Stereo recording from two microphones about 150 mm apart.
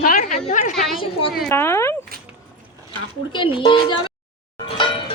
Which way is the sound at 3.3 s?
35° left (ahead or behind).